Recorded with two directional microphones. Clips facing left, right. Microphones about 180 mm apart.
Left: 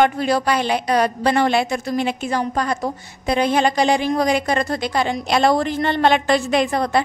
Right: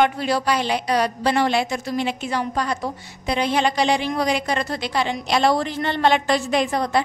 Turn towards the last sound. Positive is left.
turn(degrees=60)  # may be behind; listen again after turning